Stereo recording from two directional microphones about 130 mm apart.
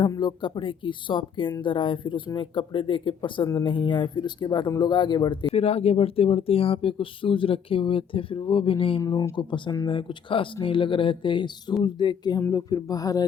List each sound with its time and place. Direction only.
0.2 s speech: 35° left (ahead or behind)
5.5 s speech: 50° left (ahead or behind)
9.0 s speech: 30° left (ahead or behind)